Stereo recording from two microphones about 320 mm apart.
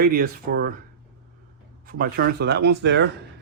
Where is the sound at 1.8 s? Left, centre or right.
Right.